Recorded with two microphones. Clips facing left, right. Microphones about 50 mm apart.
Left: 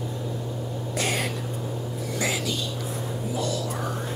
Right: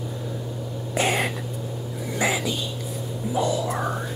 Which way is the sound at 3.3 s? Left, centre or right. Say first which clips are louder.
Right 6 dB; right.